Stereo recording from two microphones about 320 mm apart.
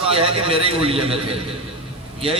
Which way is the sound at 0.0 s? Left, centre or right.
Centre.